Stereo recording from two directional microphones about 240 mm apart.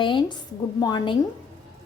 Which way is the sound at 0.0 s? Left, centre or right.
Centre.